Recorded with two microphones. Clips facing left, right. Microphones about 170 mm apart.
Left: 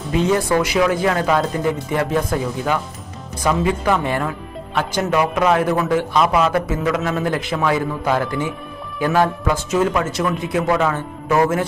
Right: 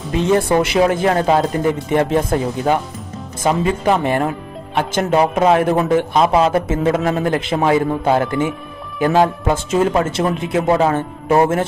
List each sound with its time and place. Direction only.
0.3 s a man's voice: 25° right (ahead or behind)